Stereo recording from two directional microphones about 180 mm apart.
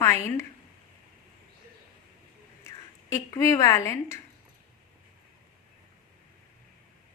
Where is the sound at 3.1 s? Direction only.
15° left (ahead or behind).